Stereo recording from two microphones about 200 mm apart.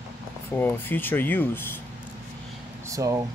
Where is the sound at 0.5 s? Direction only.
10° left (ahead or behind).